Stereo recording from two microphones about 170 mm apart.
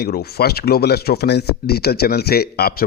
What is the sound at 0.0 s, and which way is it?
Speech, 65° left (ahead or behind).